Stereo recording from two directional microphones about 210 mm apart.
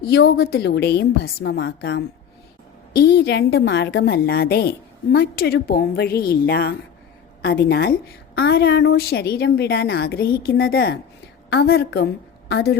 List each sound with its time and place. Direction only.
0.0 s a woman's voice: 50° left (ahead or behind)